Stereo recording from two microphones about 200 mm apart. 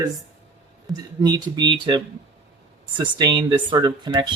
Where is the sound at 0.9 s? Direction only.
20° right (ahead or behind).